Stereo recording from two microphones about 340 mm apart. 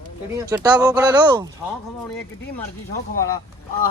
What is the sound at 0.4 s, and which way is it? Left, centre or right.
Speech, centre.